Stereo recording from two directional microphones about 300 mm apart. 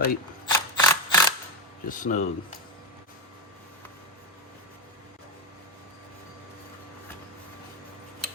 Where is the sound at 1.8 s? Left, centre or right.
Left.